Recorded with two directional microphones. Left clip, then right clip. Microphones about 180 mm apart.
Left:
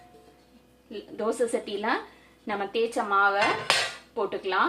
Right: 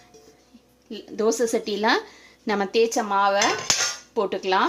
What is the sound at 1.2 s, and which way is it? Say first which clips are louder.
Speech: right 5 dB; 65° right (ahead or behind).